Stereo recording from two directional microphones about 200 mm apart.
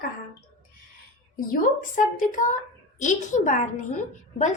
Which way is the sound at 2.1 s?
40° left (ahead or behind).